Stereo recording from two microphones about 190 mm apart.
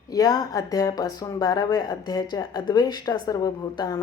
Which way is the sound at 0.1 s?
20° left (ahead or behind).